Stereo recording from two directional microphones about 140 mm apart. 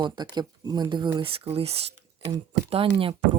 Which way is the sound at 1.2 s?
45° right (ahead or behind).